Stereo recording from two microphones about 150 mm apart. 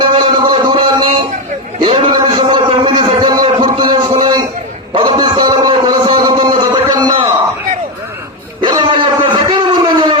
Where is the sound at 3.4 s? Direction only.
35° right (ahead or behind).